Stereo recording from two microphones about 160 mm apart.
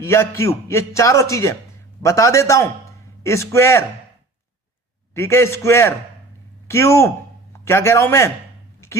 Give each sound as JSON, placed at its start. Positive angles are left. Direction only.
{"t": 0.0, "sound": "a man's voice", "side_deg": 15}
{"t": 5.1, "sound": "a man's voice", "side_deg": 15}